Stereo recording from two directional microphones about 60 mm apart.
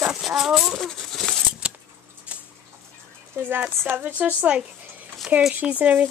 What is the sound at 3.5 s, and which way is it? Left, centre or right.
Speech, right.